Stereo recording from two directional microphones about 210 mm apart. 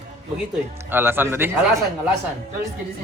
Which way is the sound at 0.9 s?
10° right (ahead or behind).